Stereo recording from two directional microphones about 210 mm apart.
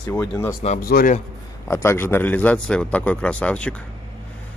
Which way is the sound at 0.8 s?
45° left (ahead or behind).